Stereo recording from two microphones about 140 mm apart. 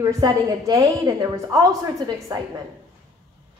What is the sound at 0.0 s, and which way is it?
A woman's voice, 25° right (ahead or behind).